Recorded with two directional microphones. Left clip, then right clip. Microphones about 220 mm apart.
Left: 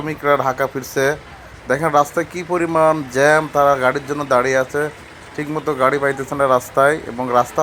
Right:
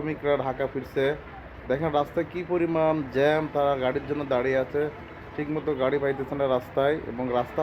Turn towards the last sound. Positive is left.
turn(degrees=20)  # may be behind; listen again after turning